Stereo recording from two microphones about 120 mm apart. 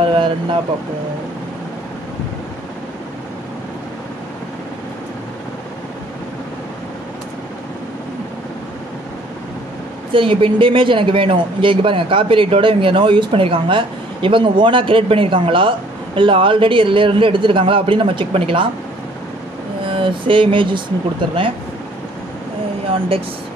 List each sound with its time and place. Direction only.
0.0 s vehicle: 45° right (ahead or behind)
10.1 s speech: 45° right (ahead or behind)
19.8 s a sound: 45° right (ahead or behind)
22.8 s speech: 50° right (ahead or behind)